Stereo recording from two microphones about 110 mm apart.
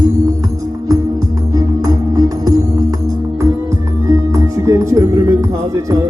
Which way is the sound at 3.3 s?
25° right (ahead or behind).